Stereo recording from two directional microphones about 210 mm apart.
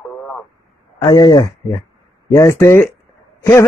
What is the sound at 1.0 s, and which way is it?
A man's voice, 20° left (ahead or behind).